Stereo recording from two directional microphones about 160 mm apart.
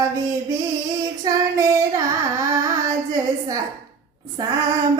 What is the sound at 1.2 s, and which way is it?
Child singing, 20° right (ahead or behind).